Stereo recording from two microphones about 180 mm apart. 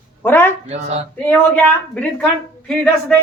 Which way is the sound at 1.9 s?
5° left (ahead or behind).